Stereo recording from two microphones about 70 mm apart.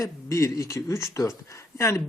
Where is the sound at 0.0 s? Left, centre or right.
Left.